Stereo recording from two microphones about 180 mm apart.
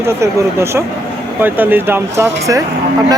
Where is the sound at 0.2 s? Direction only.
15° right (ahead or behind).